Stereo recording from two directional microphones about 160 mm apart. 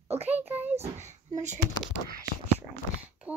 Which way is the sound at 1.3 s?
50° right (ahead or behind).